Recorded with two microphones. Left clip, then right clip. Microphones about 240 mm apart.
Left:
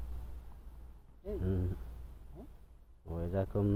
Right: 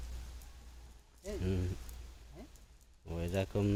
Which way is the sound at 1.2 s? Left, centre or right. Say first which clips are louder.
Even; centre.